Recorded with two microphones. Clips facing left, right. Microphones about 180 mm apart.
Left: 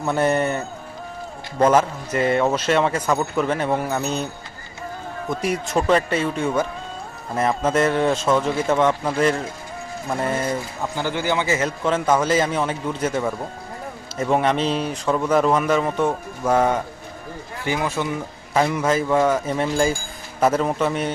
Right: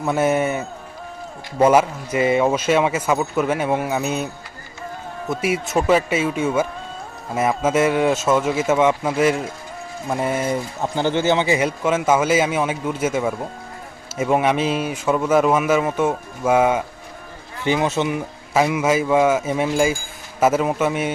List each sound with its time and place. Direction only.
0.0 s speech: 5° right (ahead or behind)
5.3 s speech: 5° right (ahead or behind)
10.9 s speech: 25° right (ahead or behind); by 16.8 s 5° right (ahead or behind)
17.7 s speech: 20° right (ahead or behind)
18.5 s speech: 5° right (ahead or behind)